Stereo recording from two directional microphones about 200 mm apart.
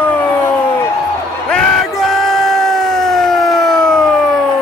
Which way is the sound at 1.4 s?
5° left (ahead or behind).